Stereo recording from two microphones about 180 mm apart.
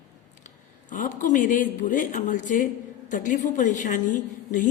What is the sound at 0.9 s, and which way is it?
A woman's voice, 45° left (ahead or behind).